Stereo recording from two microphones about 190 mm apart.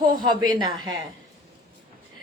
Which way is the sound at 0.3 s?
20° right (ahead or behind).